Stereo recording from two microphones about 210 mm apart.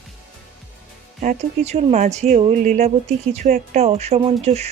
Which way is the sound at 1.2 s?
35° right (ahead or behind).